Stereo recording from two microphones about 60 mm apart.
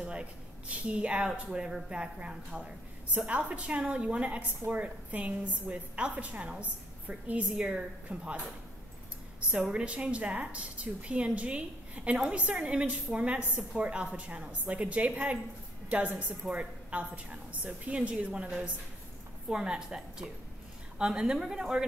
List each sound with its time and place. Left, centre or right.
0.0 s a woman's voice: centre
9.5 s a woman's voice: centre